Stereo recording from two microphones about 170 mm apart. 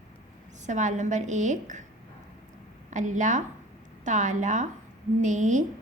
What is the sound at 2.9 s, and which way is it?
A woman's voice, 45° right (ahead or behind).